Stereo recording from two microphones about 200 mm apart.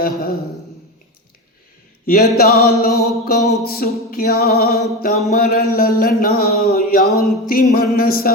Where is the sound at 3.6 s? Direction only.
50° left (ahead or behind).